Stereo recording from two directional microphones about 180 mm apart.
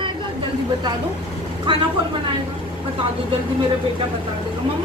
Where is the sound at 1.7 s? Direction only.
25° right (ahead or behind).